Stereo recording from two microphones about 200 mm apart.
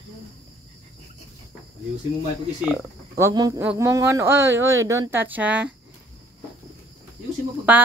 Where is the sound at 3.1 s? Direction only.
15° right (ahead or behind).